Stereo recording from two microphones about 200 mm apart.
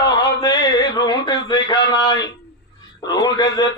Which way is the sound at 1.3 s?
20° left (ahead or behind).